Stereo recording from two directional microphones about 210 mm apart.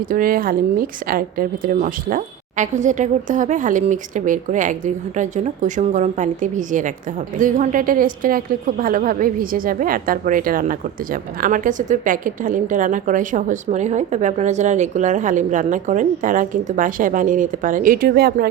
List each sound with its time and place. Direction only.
0.1 s a woman's voice: 40° right (ahead or behind)